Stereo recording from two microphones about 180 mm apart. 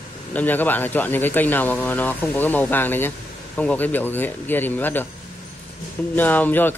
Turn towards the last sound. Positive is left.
turn(degrees=10)  # may be behind; listen again after turning